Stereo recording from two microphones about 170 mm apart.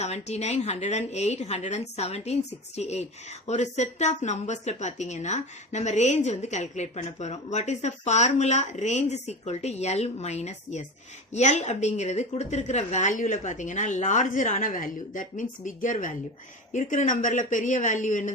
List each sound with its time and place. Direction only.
0.0 s a woman's voice: 40° left (ahead or behind)